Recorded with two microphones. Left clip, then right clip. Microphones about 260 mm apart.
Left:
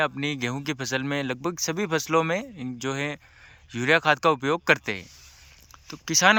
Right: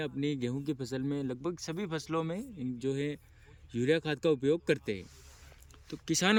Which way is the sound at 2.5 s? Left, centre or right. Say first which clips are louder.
Left 5 dB; centre.